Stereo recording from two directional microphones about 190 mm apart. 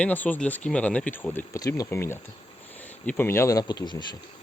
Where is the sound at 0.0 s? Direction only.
10° left (ahead or behind).